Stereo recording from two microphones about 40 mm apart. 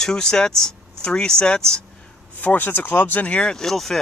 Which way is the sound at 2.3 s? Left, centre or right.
Left.